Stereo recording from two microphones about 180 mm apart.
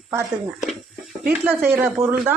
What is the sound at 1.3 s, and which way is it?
A woman's voice, 5° right (ahead or behind).